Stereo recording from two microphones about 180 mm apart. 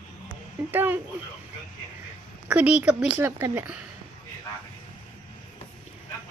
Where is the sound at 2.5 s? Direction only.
5° right (ahead or behind).